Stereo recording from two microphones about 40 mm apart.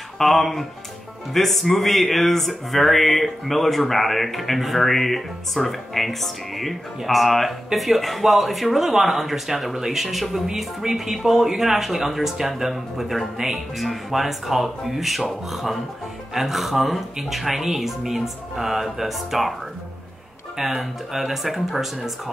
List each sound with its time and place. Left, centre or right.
0.2 s speech: centre
20.5 s speech: centre